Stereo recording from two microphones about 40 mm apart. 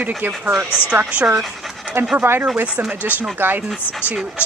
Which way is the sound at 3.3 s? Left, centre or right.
Right.